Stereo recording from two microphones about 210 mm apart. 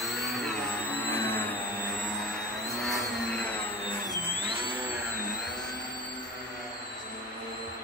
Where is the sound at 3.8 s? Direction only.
20° left (ahead or behind).